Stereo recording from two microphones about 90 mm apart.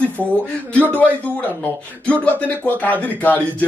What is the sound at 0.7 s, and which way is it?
Speech, 20° left (ahead or behind).